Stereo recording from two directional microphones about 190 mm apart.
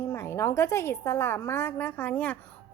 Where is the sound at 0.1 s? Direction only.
10° left (ahead or behind).